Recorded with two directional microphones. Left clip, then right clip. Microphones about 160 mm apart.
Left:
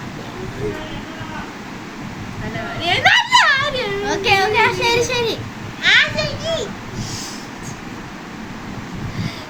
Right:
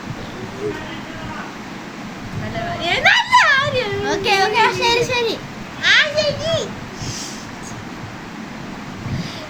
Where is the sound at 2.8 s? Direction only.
10° right (ahead or behind).